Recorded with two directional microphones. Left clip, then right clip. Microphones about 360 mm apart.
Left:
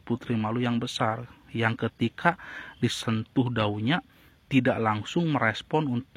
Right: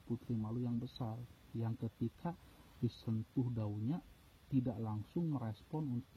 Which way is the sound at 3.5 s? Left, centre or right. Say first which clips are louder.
Left 18 dB; centre.